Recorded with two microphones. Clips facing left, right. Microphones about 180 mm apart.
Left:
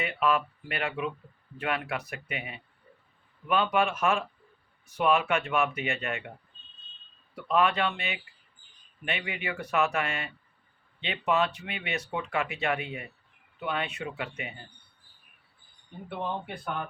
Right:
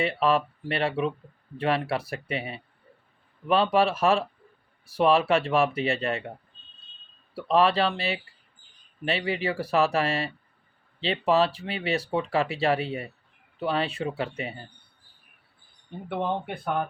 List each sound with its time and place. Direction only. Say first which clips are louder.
0.0 s speech: right 4 dB; 30° right (ahead or behind)
7.3 s speech: right 4 dB; 30° right (ahead or behind)
16.0 s speech: right 5 dB; 60° right (ahead or behind)